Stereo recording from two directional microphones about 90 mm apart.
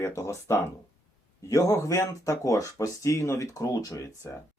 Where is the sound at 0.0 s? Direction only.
30° left (ahead or behind).